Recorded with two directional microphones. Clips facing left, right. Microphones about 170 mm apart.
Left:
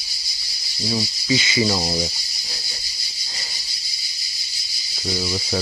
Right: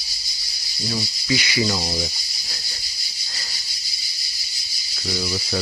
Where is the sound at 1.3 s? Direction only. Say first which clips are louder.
Left 2 dB; 25° left (ahead or behind).